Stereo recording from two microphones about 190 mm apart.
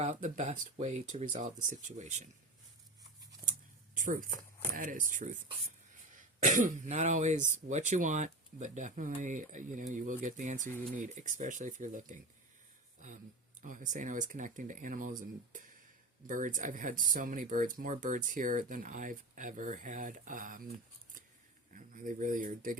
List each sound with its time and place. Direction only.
0.0 s speech: 40° right (ahead or behind)
3.9 s speech: 45° right (ahead or behind)
13.6 s speech: 40° right (ahead or behind)
16.2 s speech: 45° right (ahead or behind)
21.8 s speech: 45° right (ahead or behind)